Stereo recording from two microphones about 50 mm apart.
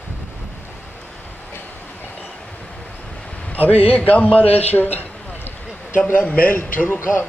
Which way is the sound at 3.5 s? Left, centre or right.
Left.